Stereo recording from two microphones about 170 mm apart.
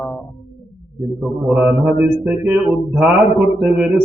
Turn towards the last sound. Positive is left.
turn(degrees=-5)  # may be behind; listen again after turning